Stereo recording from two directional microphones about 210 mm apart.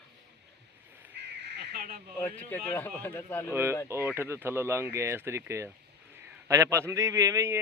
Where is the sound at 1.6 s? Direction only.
50° right (ahead or behind).